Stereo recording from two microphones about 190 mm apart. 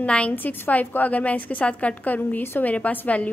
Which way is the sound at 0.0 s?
5° left (ahead or behind).